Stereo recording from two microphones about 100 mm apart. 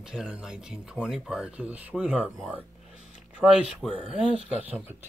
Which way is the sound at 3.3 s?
5° right (ahead or behind).